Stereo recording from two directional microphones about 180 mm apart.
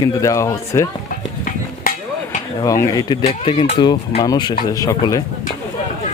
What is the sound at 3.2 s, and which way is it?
Speech, 35° left (ahead or behind).